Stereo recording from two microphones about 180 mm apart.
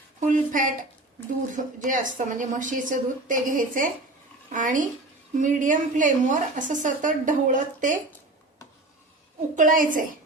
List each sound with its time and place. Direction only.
0.2 s a woman's voice: 45° right (ahead or behind)
9.6 s a woman's voice: 45° right (ahead or behind)